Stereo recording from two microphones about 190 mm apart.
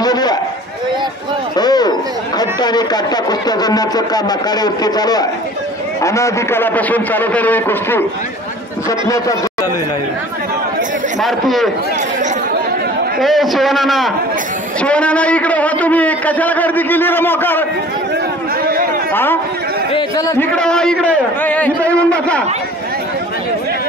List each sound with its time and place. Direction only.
0.0 s a sound: 20° left (ahead or behind)
1.6 s a man's voice: 20° left (ahead or behind)
9.0 s a man's voice: 15° left (ahead or behind)
11.1 s a man's voice: centre (ahead or behind)
13.2 s a man's voice: centre (ahead or behind)
18.6 s chatter: 50° right (ahead or behind)
19.9 s chatter: 20° left (ahead or behind)
20.5 s a man's voice: 5° left (ahead or behind)